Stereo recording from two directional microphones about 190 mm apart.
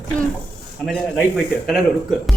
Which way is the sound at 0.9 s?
Centre (ahead or behind).